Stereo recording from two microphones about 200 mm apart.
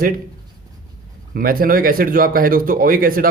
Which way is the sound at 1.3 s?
45° right (ahead or behind).